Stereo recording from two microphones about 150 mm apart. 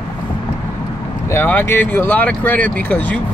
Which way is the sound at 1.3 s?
15° left (ahead or behind).